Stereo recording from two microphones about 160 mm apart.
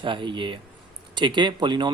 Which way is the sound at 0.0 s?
30° right (ahead or behind).